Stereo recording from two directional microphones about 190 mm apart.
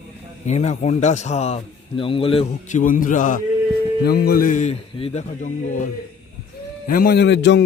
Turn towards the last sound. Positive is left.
turn(degrees=65)  # may be behind; listen again after turning